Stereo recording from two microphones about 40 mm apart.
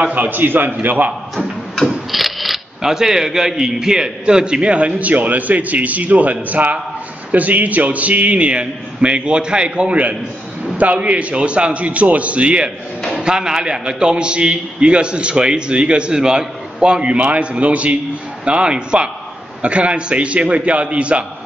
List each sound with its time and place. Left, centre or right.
0.0 s a man's voice: right
2.0 s camera: centre
2.8 s a man's voice: centre; by 21.3 s right